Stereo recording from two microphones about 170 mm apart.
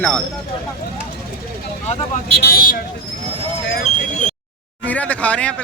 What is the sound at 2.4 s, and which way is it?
Speech, 65° left (ahead or behind).